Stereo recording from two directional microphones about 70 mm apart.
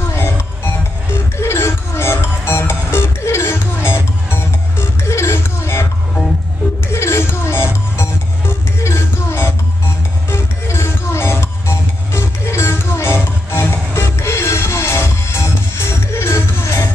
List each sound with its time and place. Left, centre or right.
0.1 s music: left
6.9 s music: left